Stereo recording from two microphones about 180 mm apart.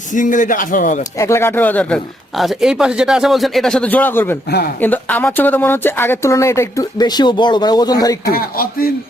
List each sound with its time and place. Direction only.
0.1 s speech: 45° left (ahead or behind)
1.2 s speech: 15° left (ahead or behind)
8.3 s speech: 55° left (ahead or behind)